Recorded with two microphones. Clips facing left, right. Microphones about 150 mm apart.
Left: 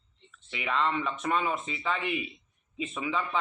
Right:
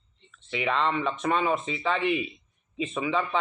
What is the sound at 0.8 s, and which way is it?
Speech, 25° right (ahead or behind).